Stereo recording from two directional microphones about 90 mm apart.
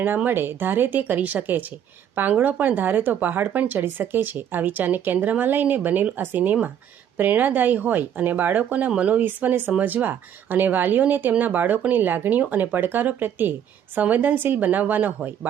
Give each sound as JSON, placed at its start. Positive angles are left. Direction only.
{"t": 0.3, "sound": "speech", "side_deg": -25}